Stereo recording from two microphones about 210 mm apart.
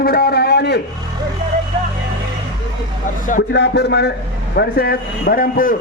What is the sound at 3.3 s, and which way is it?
A man's voice, 50° left (ahead or behind).